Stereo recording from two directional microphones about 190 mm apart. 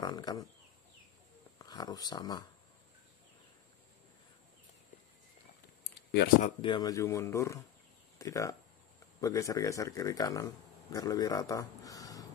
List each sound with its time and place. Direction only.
0.0 s speech: 20° left (ahead or behind)
1.6 s speech: 20° left (ahead or behind)
6.1 s speech: 45° left (ahead or behind)
6.6 s speech: 20° left (ahead or behind)